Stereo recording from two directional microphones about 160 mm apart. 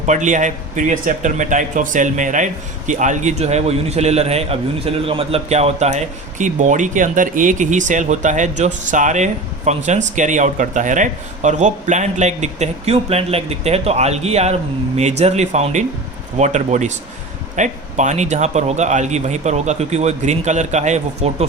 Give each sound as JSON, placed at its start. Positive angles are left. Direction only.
{"t": 0.0, "sound": "speech", "side_deg": -50}